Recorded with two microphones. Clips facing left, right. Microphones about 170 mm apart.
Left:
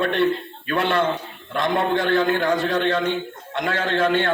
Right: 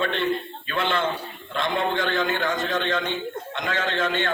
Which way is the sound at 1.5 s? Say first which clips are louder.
Left 4 dB; 55° left (ahead or behind).